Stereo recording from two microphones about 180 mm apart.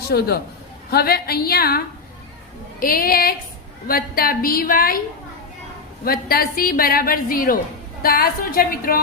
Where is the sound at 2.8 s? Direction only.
55° left (ahead or behind).